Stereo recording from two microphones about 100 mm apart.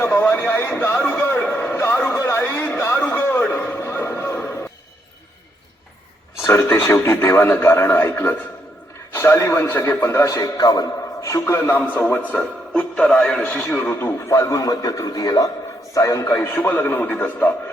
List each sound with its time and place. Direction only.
0.0 s a sound: 20° left (ahead or behind)
0.4 s music: 20° left (ahead or behind)
2.1 s a sound: 25° left (ahead or behind)
3.5 s music: 20° left (ahead or behind)
6.4 s speech: 25° left (ahead or behind)
10.3 s a man's voice: 40° left (ahead or behind); by 14.1 s 15° left (ahead or behind)
14.3 s a man's voice: 30° left (ahead or behind)